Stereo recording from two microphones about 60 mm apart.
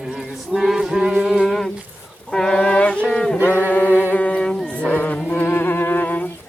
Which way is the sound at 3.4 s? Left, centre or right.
Left.